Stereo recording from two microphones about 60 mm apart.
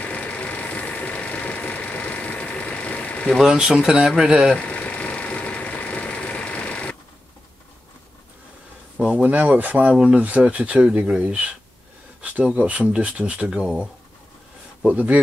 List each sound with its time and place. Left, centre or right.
0.0 s vehicle: left
3.5 s speech: centre
4.6 s engine: left
8.9 s speech: right
14.9 s speech: right